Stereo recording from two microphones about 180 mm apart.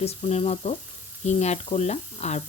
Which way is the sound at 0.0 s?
35° left (ahead or behind).